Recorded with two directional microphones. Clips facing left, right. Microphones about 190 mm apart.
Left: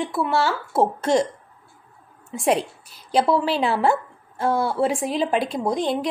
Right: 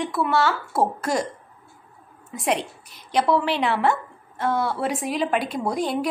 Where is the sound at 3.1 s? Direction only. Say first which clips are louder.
Left 1 dB; 30° left (ahead or behind).